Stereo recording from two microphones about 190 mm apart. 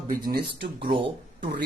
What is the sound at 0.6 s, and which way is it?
Speech, 25° right (ahead or behind).